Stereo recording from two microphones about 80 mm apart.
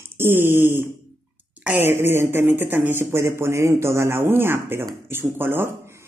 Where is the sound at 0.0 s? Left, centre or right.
Right.